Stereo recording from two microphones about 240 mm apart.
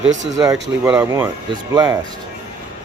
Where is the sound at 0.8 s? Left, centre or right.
Centre.